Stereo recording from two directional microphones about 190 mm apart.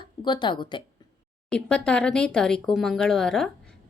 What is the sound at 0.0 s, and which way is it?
Speech, 25° left (ahead or behind).